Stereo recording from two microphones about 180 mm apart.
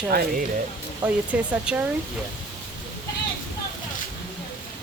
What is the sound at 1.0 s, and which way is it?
Speech, 10° right (ahead or behind).